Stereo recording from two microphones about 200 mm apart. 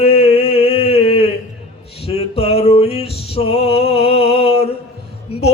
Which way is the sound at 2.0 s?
30° left (ahead or behind).